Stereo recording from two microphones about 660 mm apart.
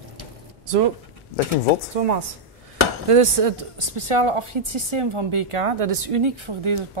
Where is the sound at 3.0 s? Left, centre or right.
Right.